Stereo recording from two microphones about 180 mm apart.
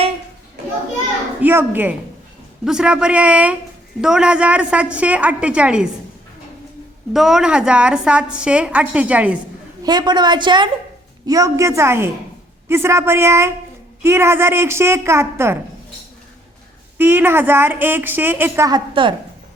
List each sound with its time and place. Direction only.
1.4 s a woman's voice: 10° right (ahead or behind)
7.1 s a woman's voice: centre (ahead or behind)
9.8 s a woman's voice: 25° right (ahead or behind)
17.0 s a woman's voice: 10° right (ahead or behind)